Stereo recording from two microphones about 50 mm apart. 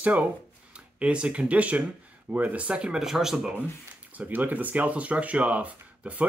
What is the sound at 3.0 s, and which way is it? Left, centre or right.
Speech, centre.